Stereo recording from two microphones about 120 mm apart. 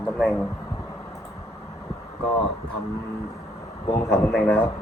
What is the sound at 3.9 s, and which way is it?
Speech, 20° left (ahead or behind).